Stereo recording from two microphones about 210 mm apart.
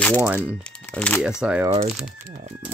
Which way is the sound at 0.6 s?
5° left (ahead or behind).